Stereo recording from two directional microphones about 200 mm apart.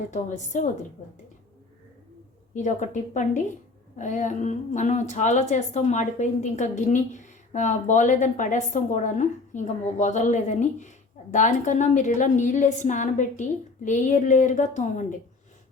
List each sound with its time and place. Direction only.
0.1 s a woman's voice: 40° left (ahead or behind)
2.6 s a woman's voice: 40° left (ahead or behind)